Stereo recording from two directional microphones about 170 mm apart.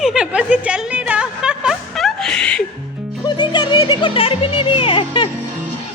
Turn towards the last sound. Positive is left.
turn(degrees=30)  # may be behind; listen again after turning